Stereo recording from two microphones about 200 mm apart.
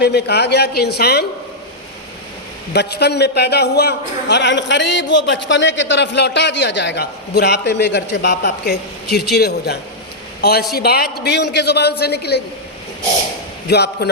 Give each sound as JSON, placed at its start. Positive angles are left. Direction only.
{"t": 0.0, "sound": "a man's voice", "side_deg": 55}
{"t": 2.7, "sound": "a man's voice", "side_deg": 55}
{"t": 13.7, "sound": "a man's voice", "side_deg": 55}